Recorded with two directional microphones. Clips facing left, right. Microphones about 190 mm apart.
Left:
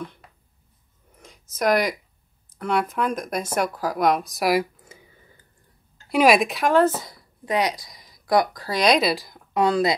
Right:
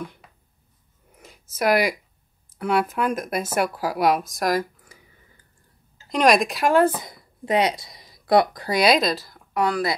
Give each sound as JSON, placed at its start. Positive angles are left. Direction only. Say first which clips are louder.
{"t": 0.0, "sound": "a sound", "louder": "even", "side_deg": -10}
{"t": 2.5, "sound": "speech", "louder": "right 1 dB", "side_deg": -5}
{"t": 4.9, "sound": "a sound", "louder": "left 4 dB", "side_deg": 25}
{"t": 6.0, "sound": "a woman's voice", "louder": "left 1 dB", "side_deg": 5}
{"t": 8.6, "sound": "speech", "louder": "right 1 dB", "side_deg": -10}
{"t": 9.0, "sound": "a woman's voice", "louder": "left 1 dB", "side_deg": 10}